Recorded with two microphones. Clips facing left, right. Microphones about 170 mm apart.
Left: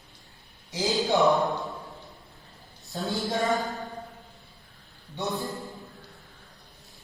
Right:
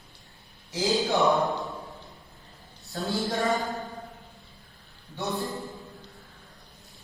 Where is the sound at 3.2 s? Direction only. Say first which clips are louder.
Left 1 dB; centre (ahead or behind).